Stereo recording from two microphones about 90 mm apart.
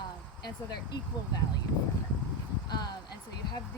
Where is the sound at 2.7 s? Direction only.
50° left (ahead or behind).